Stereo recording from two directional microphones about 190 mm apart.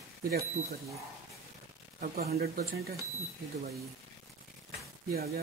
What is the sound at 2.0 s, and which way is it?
Speech, 50° right (ahead or behind).